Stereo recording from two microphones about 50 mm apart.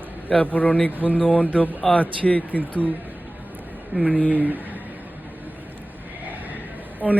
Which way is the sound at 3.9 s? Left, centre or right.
Right.